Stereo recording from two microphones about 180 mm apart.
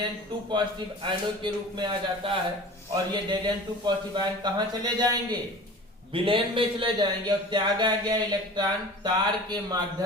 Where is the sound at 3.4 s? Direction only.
25° right (ahead or behind).